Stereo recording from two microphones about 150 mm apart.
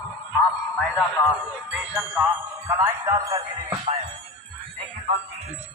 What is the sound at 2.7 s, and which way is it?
Music, 20° right (ahead or behind).